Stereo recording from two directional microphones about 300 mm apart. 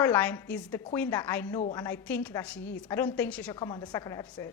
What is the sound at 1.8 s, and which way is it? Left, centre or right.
A woman's voice, centre.